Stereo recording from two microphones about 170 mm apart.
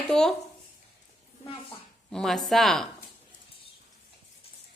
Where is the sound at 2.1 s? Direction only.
Centre (ahead or behind).